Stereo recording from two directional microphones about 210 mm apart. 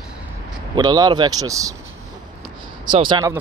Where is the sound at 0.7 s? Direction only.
20° right (ahead or behind).